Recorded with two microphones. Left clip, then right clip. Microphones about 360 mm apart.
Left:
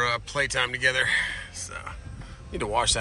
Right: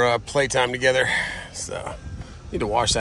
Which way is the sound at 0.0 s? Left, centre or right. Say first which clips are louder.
Right 5 dB; centre.